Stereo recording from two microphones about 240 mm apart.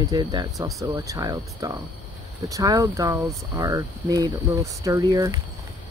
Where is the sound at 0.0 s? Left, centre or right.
Centre.